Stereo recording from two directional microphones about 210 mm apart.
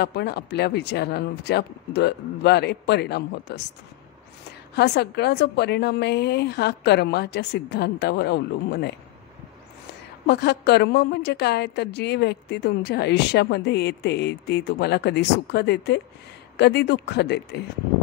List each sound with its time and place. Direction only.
0.0 s a woman's voice: 50° left (ahead or behind)
4.7 s a woman's voice: 50° left (ahead or behind)
10.2 s a woman's voice: 50° left (ahead or behind)